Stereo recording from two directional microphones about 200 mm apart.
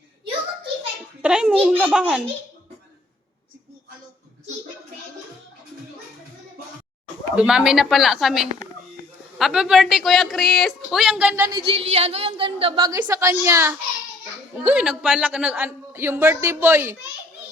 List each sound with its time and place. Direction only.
1.2 s speech: 5° right (ahead or behind)
7.3 s speech: 5° right (ahead or behind)
11.5 s a woman's voice: 30° right (ahead or behind); by 17.0 s 10° right (ahead or behind)